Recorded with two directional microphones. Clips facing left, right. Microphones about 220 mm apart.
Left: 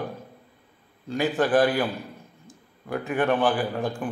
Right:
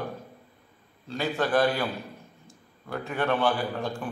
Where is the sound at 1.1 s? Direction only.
15° left (ahead or behind).